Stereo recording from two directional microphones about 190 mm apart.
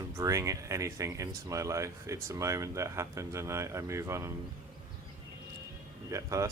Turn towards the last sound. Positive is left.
turn(degrees=-15)  # may be behind; listen again after turning